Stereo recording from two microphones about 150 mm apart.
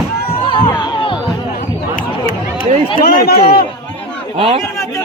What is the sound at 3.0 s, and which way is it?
Speech, 90° left.